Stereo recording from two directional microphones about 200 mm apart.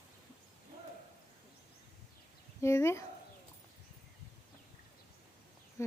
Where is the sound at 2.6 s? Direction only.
15° left (ahead or behind).